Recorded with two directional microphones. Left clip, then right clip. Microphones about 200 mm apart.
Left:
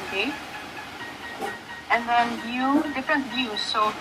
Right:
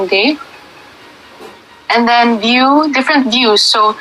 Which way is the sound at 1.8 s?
50° right (ahead or behind).